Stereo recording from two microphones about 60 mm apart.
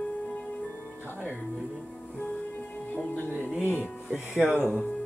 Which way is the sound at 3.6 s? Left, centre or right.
Left.